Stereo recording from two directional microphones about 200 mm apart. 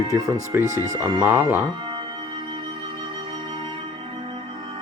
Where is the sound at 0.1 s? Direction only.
15° right (ahead or behind).